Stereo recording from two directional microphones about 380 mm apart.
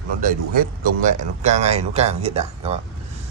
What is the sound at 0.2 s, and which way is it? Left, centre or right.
Speech, right.